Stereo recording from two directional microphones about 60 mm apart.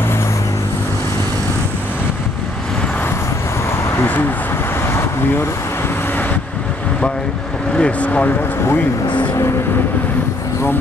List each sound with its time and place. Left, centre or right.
4.0 s vehicle: left
4.8 s vehicle: left
7.7 s speech: centre